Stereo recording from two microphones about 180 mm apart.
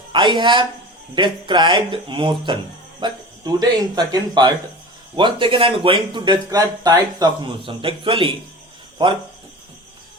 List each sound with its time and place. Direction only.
0.1 s a man's voice: 25° right (ahead or behind)